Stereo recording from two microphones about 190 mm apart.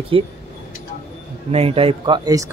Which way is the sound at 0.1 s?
30° right (ahead or behind).